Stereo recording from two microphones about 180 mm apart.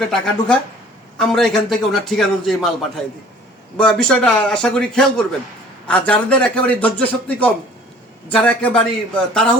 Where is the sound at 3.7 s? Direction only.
5° left (ahead or behind).